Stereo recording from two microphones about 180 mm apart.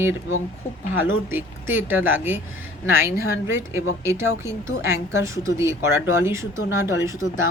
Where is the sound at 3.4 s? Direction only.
15° right (ahead or behind).